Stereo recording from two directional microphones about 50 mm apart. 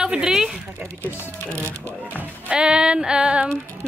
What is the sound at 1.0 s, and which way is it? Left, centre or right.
Speech, right.